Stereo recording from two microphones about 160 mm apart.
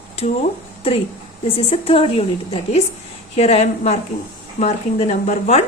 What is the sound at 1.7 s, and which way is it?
A woman's voice, 35° left (ahead or behind).